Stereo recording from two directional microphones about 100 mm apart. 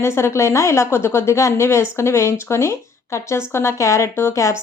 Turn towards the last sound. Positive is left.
turn(degrees=30)  # may be behind; listen again after turning